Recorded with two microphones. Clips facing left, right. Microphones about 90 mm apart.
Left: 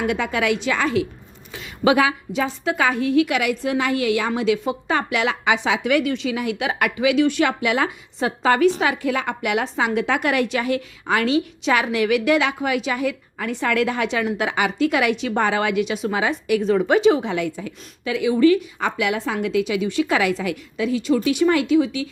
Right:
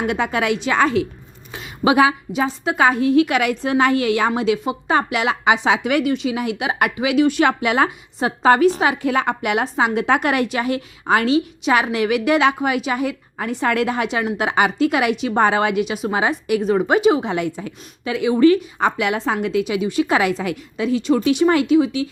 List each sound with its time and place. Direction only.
0.1 s a woman's voice: 30° right (ahead or behind)
1.5 s a sound: 20° right (ahead or behind)
2.4 s a woman's voice: 30° right (ahead or behind)
3.2 s a woman's voice: 35° right (ahead or behind); by 7.4 s 20° right (ahead or behind)
7.4 s a woman's voice: 30° right (ahead or behind); by 16.1 s 15° right (ahead or behind)
16.1 s a woman's voice: 25° right (ahead or behind)
19.6 s a woman's voice: 20° right (ahead or behind)